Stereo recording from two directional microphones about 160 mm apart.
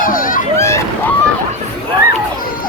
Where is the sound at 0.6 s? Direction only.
15° left (ahead or behind).